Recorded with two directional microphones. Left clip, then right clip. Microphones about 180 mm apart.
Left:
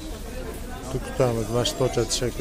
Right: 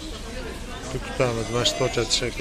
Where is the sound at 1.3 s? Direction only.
20° left (ahead or behind).